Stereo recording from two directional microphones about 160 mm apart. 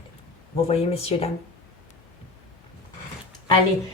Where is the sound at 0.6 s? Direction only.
40° left (ahead or behind).